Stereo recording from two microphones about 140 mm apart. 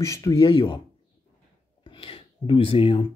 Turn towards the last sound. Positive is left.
turn(degrees=40)  # may be behind; listen again after turning